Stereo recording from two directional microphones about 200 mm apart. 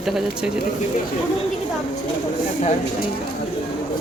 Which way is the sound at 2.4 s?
40° left (ahead or behind).